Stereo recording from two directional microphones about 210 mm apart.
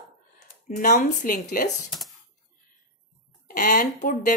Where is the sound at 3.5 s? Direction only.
40° left (ahead or behind).